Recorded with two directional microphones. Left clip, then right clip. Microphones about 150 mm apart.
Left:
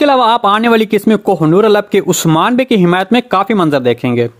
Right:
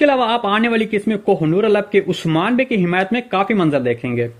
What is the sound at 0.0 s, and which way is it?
Speech, 35° left (ahead or behind).